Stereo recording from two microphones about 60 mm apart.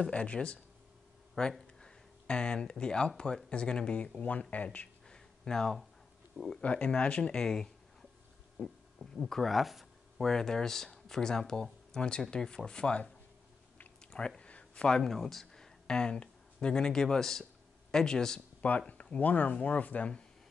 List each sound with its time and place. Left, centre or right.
0.0 s speech: left
1.8 s a sound: centre
3.4 s speech: centre
5.0 s a sound: centre
6.3 s speech: centre
6.6 s speech: left
8.9 s speech: centre
14.1 s a sound: centre
15.0 s speech: centre
18.6 s speech: left